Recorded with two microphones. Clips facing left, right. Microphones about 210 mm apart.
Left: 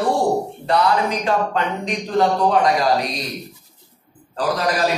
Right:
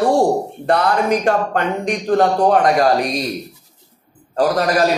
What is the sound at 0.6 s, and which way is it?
Speech, 55° right (ahead or behind).